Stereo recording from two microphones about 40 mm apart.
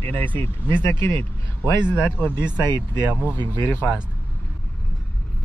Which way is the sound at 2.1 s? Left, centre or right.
Left.